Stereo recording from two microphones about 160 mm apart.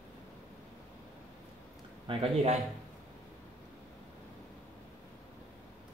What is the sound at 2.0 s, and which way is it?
Speech, 40° right (ahead or behind).